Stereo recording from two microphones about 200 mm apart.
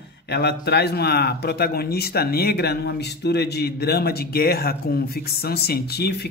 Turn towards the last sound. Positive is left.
turn(degrees=55)  # may be behind; listen again after turning